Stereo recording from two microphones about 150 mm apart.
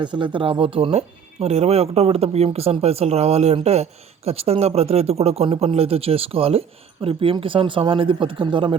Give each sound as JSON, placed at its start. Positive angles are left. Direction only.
{"t": 0.0, "sound": "speech", "side_deg": -30}